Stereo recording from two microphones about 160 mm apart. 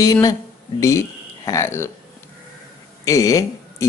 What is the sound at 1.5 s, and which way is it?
Speech, 15° left (ahead or behind).